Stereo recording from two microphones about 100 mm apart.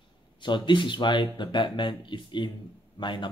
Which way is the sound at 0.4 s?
50° left (ahead or behind).